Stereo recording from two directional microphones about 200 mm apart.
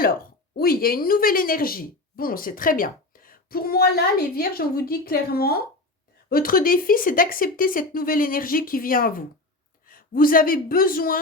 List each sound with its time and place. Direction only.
0.0 s speech: 45° left (ahead or behind)